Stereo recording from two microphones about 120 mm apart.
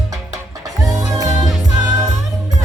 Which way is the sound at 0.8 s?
30° right (ahead or behind).